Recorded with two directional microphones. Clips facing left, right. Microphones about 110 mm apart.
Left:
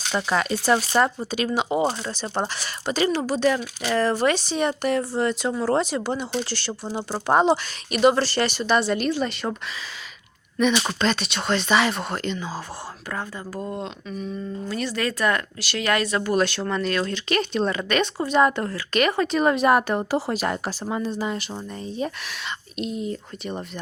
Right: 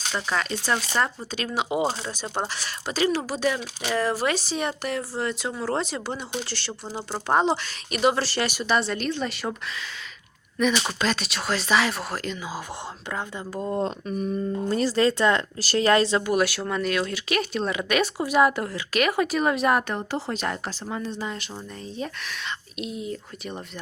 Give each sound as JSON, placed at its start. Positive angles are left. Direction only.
{"t": 0.3, "sound": "speech", "side_deg": 15}
{"t": 2.0, "sound": "speech", "side_deg": -10}
{"t": 10.6, "sound": "speech", "side_deg": 0}
{"t": 13.1, "sound": "speech", "side_deg": -20}
{"t": 13.8, "sound": "a sound", "side_deg": -45}
{"t": 14.7, "sound": "speech", "side_deg": -35}
{"t": 15.6, "sound": "speech", "side_deg": -35}
{"t": 16.2, "sound": "speech", "side_deg": -10}